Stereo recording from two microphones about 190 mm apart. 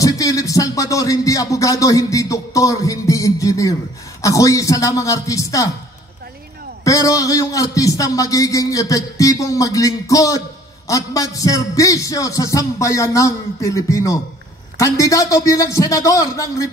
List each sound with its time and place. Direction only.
0.0 s speech: 20° left (ahead or behind)
6.8 s speech: 15° left (ahead or behind)